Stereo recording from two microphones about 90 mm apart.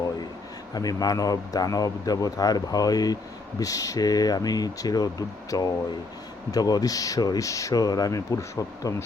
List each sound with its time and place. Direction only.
0.7 s a man's voice: 45° left (ahead or behind)